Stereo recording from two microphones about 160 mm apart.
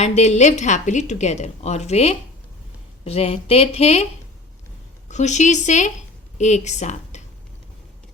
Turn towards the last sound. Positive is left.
turn(degrees=45)  # may be behind; listen again after turning